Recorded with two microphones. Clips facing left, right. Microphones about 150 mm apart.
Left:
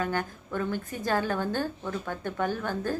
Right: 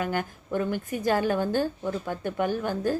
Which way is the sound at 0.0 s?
20° right (ahead or behind).